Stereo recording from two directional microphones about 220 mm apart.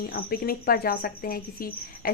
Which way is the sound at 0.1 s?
45° left (ahead or behind).